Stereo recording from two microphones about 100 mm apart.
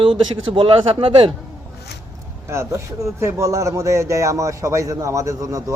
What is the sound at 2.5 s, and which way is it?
A man's voice, 25° right (ahead or behind).